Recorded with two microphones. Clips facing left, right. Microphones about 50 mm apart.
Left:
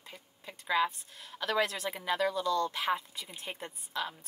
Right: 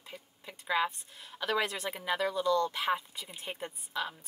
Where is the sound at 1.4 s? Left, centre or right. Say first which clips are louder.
Left 1 dB; centre.